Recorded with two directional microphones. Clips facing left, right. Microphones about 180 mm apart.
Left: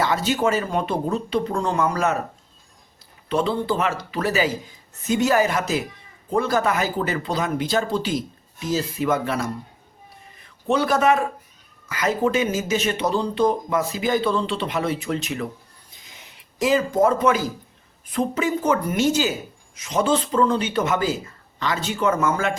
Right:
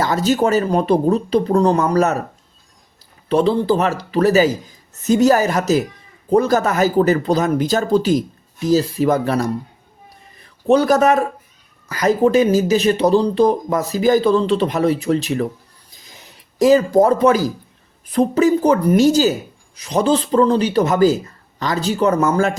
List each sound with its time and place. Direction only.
0.0 s speech: 40° right (ahead or behind)
3.2 s a man's voice: 35° right (ahead or behind)
15.9 s a sound: 40° right (ahead or behind)
18.1 s speech: 40° right (ahead or behind)